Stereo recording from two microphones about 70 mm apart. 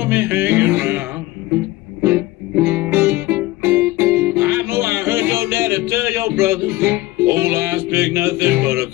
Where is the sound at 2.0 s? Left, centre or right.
Right.